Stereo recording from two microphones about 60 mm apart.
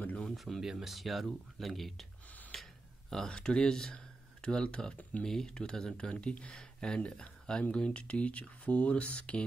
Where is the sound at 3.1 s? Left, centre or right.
Centre.